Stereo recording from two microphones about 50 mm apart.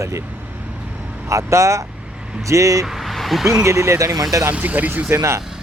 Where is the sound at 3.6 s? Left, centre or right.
Right.